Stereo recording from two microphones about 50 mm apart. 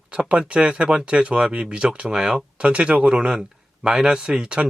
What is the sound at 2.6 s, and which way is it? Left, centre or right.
Speech, right.